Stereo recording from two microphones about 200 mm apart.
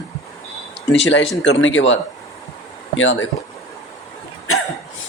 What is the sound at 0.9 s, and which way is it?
Speech, 65° left (ahead or behind).